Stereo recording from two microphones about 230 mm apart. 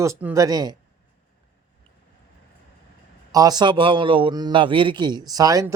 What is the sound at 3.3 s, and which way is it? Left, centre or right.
A man's voice, centre.